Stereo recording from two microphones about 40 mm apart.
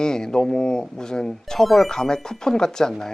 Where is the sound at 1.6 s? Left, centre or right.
Centre.